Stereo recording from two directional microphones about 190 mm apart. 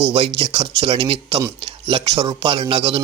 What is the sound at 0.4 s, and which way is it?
Speech, 35° right (ahead or behind).